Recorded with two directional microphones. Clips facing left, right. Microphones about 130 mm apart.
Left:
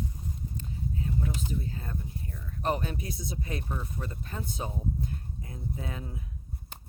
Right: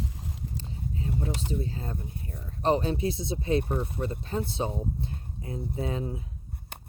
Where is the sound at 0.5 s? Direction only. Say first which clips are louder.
Even; 30° right (ahead or behind).